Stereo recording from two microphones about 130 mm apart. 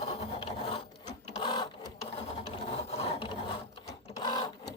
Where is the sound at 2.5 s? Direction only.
50° left (ahead or behind).